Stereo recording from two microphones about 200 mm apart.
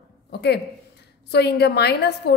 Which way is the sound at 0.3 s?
55° left (ahead or behind).